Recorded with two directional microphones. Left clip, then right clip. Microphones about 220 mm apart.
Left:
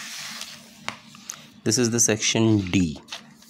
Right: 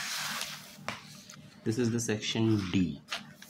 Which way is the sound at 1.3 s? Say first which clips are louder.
Left 10 dB; 50° left (ahead or behind).